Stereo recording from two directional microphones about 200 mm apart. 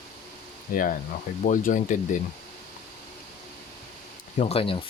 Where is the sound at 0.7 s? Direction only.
45° left (ahead or behind).